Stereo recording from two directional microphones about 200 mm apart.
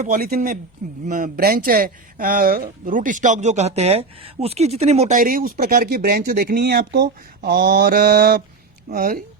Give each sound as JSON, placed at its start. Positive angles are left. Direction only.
{"t": 0.0, "sound": "a man's voice", "side_deg": -45}